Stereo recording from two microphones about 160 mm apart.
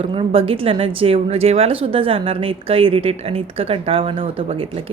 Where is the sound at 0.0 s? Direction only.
35° right (ahead or behind).